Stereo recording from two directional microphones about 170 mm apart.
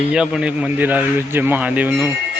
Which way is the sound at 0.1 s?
5° right (ahead or behind).